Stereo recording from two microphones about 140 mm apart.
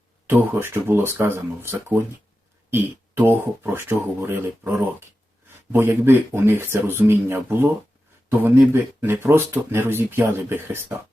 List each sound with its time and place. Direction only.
0.3 s speech: 15° right (ahead or behind)